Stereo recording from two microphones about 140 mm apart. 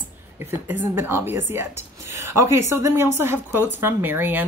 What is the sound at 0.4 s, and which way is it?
A woman's voice, 15° right (ahead or behind).